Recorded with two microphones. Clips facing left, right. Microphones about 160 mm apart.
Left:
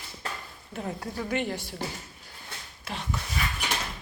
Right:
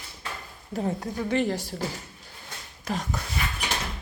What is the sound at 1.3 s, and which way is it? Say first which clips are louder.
Speech: right 5 dB; 40° right (ahead or behind).